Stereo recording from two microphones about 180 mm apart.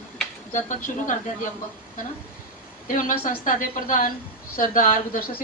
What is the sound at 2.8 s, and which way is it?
A woman's voice, 45° left (ahead or behind).